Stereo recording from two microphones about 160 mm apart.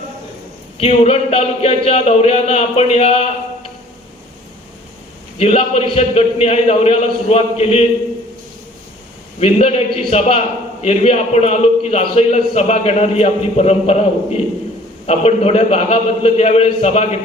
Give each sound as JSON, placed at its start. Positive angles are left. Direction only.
{"t": 0.8, "sound": "a man's voice", "side_deg": 40}
{"t": 5.4, "sound": "a man's voice", "side_deg": 40}
{"t": 9.4, "sound": "a man's voice", "side_deg": 40}